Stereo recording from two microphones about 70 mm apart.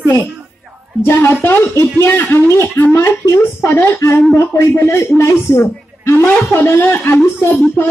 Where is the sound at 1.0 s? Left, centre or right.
Left.